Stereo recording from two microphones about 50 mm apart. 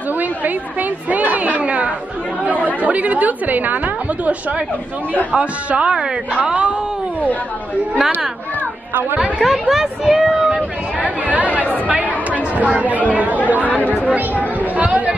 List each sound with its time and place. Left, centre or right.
0.2 s a sound: right
2.4 s speech: right
5.3 s a man's voice: right
9.4 s speech: centre
11.2 s chatter: right
13.5 s speech: right
13.7 s speech: left
14.6 s a man's voice: right